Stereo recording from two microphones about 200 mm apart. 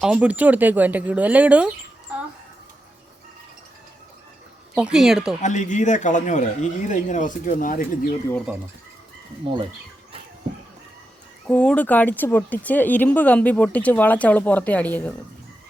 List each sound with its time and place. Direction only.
0.0 s speech: 5° right (ahead or behind)
4.8 s speech: 5° right (ahead or behind)
5.4 s speech: 35° left (ahead or behind)
8.5 s speech: 5° right (ahead or behind)
11.4 s speech: 5° left (ahead or behind)